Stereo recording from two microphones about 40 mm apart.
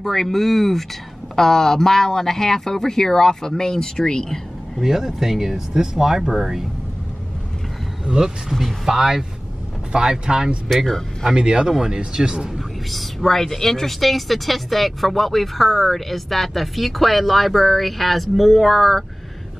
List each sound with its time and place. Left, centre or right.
0.0 s speech: centre
4.7 s speech: centre
8.0 s speech: centre
8.5 s speech: centre
8.8 s speech: centre
10.7 s speech: centre
11.3 s speech: right
11.6 s speech: centre
12.5 s speech: centre